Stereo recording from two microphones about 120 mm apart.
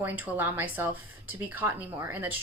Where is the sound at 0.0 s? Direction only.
15° right (ahead or behind).